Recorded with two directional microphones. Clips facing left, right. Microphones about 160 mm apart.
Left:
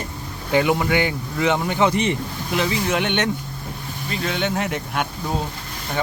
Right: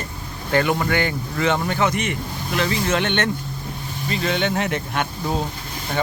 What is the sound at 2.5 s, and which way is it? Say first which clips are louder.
Speech: even; 15° left (ahead or behind).